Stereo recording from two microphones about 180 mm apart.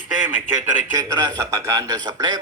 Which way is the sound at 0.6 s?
15° right (ahead or behind).